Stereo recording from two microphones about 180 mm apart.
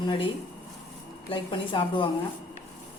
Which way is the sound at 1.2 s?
30° left (ahead or behind).